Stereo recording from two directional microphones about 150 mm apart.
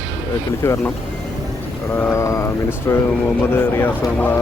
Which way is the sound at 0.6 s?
20° left (ahead or behind).